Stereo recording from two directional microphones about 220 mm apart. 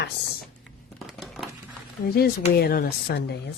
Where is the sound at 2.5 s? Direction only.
45° left (ahead or behind).